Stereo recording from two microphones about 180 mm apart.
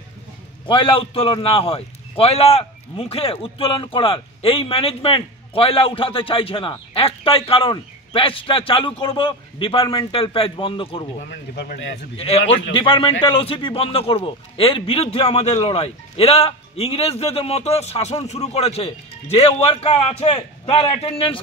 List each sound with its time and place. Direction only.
0.7 s a man's voice: 30° left (ahead or behind)
11.1 s speech: 75° left (ahead or behind)
12.2 s a man's voice: 35° left (ahead or behind)